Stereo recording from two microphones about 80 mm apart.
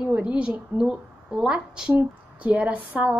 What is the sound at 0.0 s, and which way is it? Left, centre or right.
A woman's voice, centre.